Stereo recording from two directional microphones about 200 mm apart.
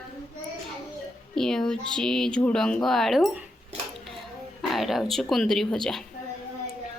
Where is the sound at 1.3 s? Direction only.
Centre (ahead or behind).